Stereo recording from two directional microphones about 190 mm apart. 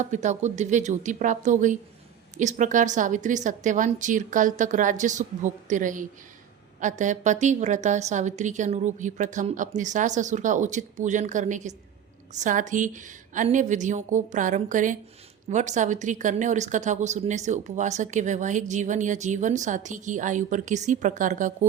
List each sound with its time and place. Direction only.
0.0 s speech: 40° right (ahead or behind)